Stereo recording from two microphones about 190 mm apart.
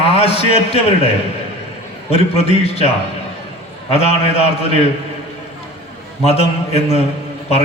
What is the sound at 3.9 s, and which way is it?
A man's voice, 35° left (ahead or behind).